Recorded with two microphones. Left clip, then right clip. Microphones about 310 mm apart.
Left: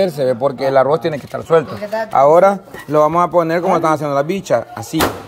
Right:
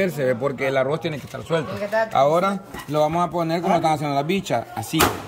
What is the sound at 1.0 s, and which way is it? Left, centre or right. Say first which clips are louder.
Speech: left 9 dB; left.